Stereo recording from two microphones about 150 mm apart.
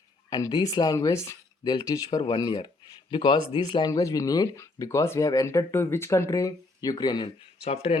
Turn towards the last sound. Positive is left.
turn(degrees=45)  # may be behind; listen again after turning